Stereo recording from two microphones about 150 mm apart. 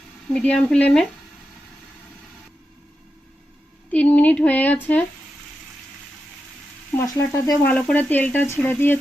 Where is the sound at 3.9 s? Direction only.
10° left (ahead or behind).